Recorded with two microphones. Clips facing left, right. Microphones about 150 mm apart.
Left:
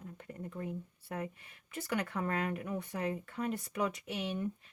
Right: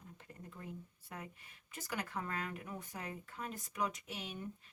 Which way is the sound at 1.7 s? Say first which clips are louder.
Left 6 dB; 60° left (ahead or behind).